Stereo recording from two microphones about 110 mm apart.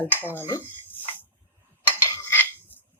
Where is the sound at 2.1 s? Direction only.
25° left (ahead or behind).